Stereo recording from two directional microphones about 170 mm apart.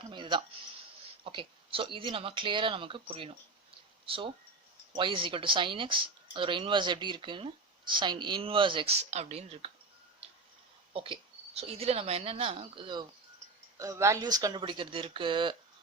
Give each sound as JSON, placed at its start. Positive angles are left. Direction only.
{"t": 0.1, "sound": "speech", "side_deg": -30}
{"t": 10.9, "sound": "a woman's voice", "side_deg": -30}
{"t": 13.7, "sound": "speech", "side_deg": -20}